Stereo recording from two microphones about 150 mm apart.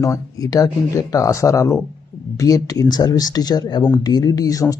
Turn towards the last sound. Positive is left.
turn(degrees=25)  # may be behind; listen again after turning